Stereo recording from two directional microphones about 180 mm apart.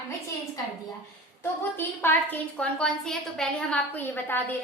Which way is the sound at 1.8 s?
10° left (ahead or behind).